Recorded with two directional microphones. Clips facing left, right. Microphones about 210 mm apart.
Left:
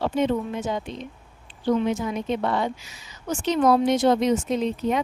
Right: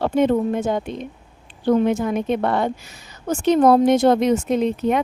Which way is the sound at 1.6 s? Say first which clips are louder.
Right 5 dB; 55° right (ahead or behind).